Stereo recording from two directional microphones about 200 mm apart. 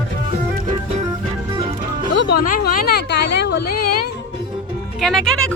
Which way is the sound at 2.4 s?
45° left (ahead or behind).